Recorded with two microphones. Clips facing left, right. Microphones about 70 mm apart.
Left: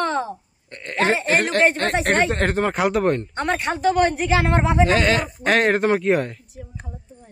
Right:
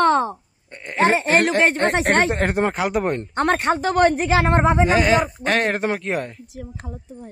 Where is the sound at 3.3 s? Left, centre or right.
Right.